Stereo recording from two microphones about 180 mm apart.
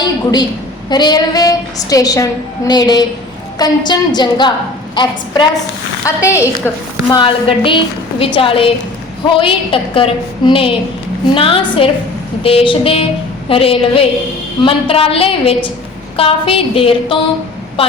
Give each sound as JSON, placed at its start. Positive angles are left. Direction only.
{"t": 0.0, "sound": "a sound", "side_deg": 20}
{"t": 0.9, "sound": "a woman's voice", "side_deg": 25}
{"t": 7.1, "sound": "a woman's voice", "side_deg": 25}